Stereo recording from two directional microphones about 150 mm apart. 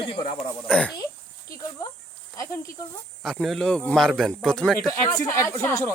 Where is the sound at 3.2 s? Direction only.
Centre (ahead or behind).